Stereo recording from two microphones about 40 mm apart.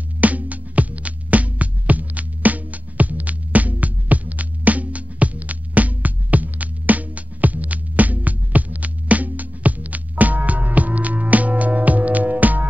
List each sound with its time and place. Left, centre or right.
0.2 s music: right